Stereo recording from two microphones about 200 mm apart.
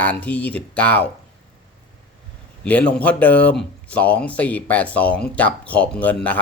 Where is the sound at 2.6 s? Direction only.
5° left (ahead or behind).